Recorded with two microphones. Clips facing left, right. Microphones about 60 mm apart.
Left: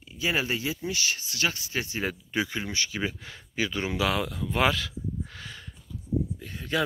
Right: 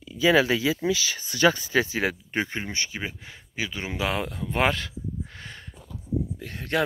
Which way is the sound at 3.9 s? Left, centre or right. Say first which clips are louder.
Right 2 dB; right.